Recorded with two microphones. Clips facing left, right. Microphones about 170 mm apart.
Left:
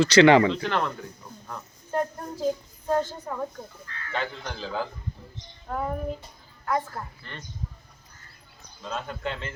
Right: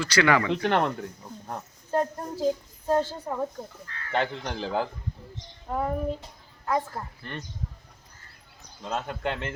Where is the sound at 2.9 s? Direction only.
30° right (ahead or behind).